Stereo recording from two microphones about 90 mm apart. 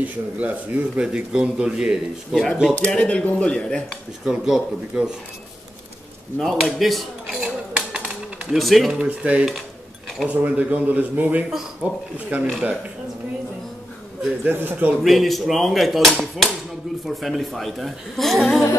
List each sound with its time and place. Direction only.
0.0 s a man's voice: 15° right (ahead or behind)
2.9 s speech: 10° left (ahead or behind)
4.2 s a man's voice: 5° right (ahead or behind)
6.4 s cutlery: centre (ahead or behind)
8.5 s a man's voice: centre (ahead or behind)
9.0 s a man's voice: 15° right (ahead or behind)
14.4 s a man's voice: 25° right (ahead or behind)
15.0 s a man's voice: centre (ahead or behind)